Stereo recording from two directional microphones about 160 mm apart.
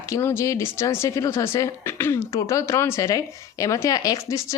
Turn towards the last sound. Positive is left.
turn(degrees=20)  # may be behind; listen again after turning